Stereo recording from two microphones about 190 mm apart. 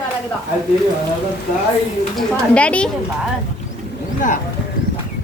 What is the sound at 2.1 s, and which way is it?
Speech, 5° left (ahead or behind).